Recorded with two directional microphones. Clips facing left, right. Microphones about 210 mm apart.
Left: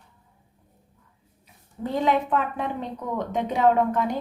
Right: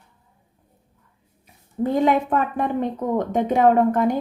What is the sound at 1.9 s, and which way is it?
Speech, 50° right (ahead or behind).